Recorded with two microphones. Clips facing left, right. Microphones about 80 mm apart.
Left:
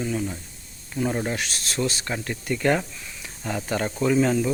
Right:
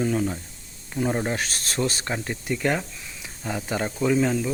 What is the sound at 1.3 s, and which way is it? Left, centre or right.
Speech, right.